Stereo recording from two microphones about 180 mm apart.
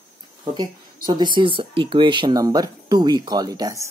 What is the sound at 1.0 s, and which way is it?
Speech, 25° right (ahead or behind).